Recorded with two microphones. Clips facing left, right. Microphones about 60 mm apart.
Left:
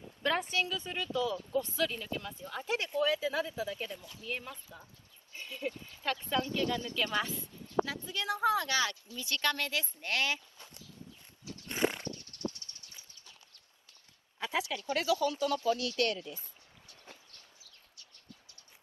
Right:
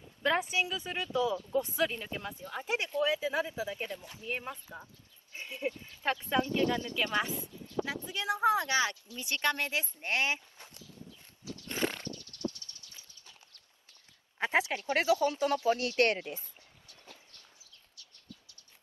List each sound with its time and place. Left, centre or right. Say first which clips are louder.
0.2 s speech: right 2 dB; centre
3.8 s speech: right 2 dB; right
5.3 s sheep: right 2 dB; right
6.2 s speech: right 3 dB; right
11.4 s roaring cats: right 3 dB; left
11.7 s horse: left 2 dB; left
12.1 s a sound: right 1 dB; left
14.4 s speech: right 5 dB; right